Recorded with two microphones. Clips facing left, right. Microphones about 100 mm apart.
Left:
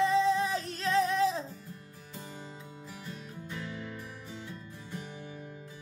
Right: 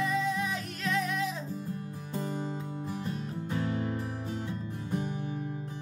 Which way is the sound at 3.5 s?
45° right (ahead or behind).